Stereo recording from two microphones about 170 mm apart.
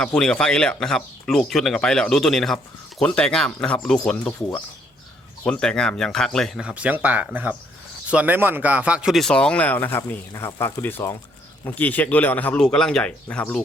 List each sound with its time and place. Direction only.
0.0 s speech: 5° left (ahead or behind)